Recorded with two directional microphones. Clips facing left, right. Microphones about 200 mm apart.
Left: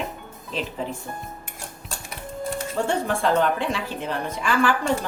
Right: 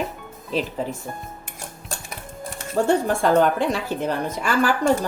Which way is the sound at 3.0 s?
40° right (ahead or behind).